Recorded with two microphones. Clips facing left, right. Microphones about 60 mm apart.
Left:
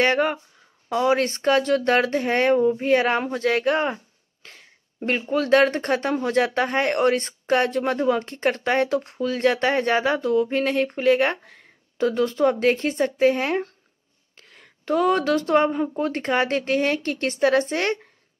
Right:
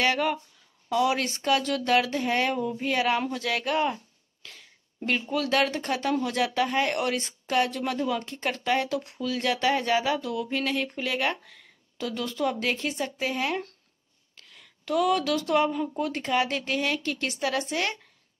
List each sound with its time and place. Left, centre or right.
0.0 s speech: left
10.2 s speech: left